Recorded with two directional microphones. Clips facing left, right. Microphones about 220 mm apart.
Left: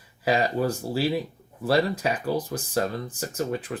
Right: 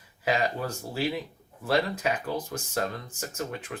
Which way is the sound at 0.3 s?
35° left (ahead or behind).